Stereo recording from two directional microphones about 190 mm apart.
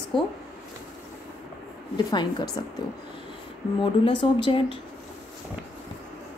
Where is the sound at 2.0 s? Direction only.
20° left (ahead or behind).